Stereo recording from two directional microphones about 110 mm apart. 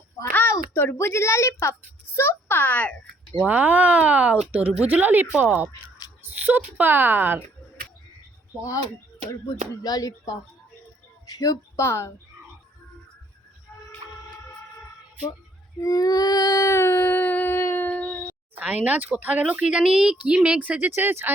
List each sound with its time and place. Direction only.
0.3 s a child's voice: 20° left (ahead or behind)
3.4 s speech: 15° right (ahead or behind)
9.8 s a sound: 35° left (ahead or behind)
11.3 s speech: 35° left (ahead or behind)
15.8 s child singing: 30° left (ahead or behind); by 18.3 s 15° left (ahead or behind)
18.5 s speech: 15° right (ahead or behind)